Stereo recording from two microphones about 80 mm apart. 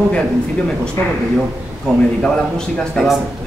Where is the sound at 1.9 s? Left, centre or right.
Centre.